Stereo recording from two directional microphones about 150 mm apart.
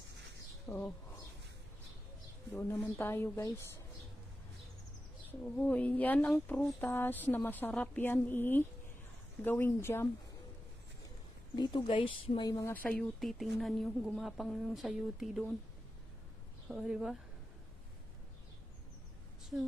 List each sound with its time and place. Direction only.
0.7 s speech: 10° left (ahead or behind)
2.6 s speech: 10° left (ahead or behind)
5.4 s speech: 10° left (ahead or behind)
11.5 s speech: 30° left (ahead or behind)
12.7 s speech: 10° left (ahead or behind)
16.6 s speech: 5° right (ahead or behind)